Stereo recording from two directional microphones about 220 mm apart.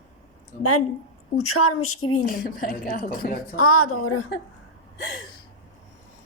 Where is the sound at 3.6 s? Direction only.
75° left (ahead or behind).